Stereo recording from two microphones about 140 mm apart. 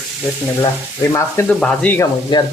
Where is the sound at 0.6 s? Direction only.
20° left (ahead or behind).